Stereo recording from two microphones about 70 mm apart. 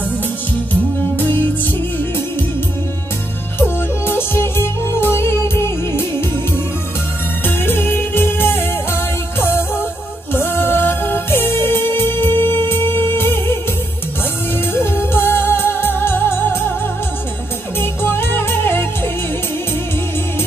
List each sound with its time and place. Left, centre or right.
3.5 s music: left
7.4 s music: left
14.7 s music: left
17.7 s music: left